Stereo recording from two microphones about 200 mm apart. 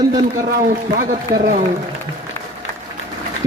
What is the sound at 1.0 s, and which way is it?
Speech, 40° right (ahead or behind).